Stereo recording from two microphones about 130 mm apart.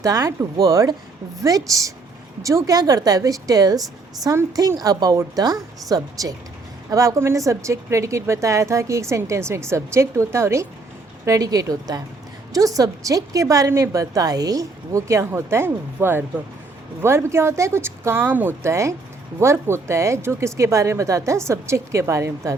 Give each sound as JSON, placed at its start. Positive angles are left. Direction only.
{"t": 0.0, "sound": "speech", "side_deg": -25}